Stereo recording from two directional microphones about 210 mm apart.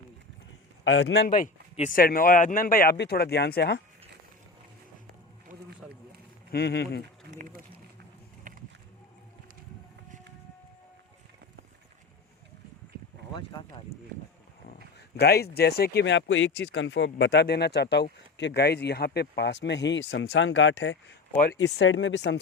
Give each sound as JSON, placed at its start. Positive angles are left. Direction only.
{"t": 1.0, "sound": "a man's voice", "side_deg": 50}
{"t": 6.5, "sound": "speech", "side_deg": 50}
{"t": 7.3, "sound": "a sound", "side_deg": -40}
{"t": 15.1, "sound": "speech", "side_deg": 50}